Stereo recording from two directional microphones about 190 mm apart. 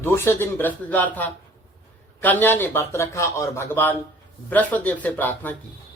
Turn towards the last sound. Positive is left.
turn(degrees=10)  # may be behind; listen again after turning